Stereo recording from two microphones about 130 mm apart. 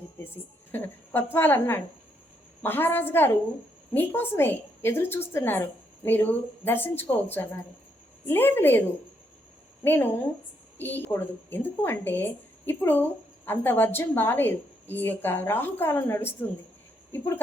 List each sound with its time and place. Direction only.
0.7 s a woman's voice: 15° left (ahead or behind)
8.3 s a woman's voice: 15° left (ahead or behind)
9.8 s a woman's voice: 15° left (ahead or behind)